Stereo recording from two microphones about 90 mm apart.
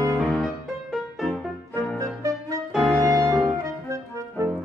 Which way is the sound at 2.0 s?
40° right (ahead or behind).